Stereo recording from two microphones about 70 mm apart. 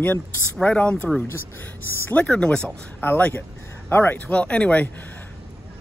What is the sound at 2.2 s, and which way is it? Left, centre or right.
Speech, centre.